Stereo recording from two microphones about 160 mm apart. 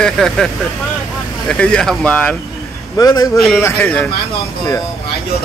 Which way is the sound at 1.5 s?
5° left (ahead or behind).